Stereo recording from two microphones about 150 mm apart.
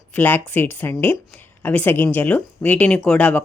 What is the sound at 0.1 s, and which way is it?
Speech, 15° left (ahead or behind).